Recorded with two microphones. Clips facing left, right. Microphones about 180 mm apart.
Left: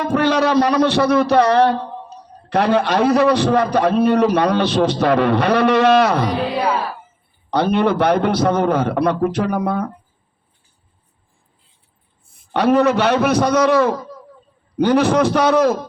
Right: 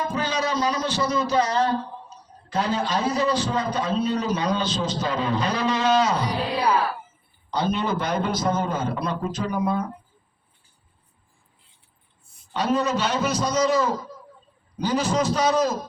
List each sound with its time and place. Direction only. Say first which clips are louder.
0.0 s a man's voice: left 9 dB; 65° left (ahead or behind)
12.3 s a man's voice: left 8 dB; 60° left (ahead or behind)